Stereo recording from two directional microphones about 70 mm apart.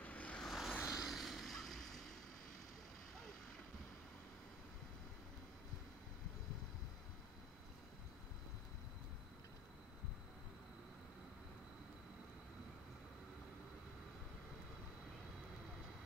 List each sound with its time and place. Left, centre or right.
0.0 s vehicle: left
0.4 s vehicle: centre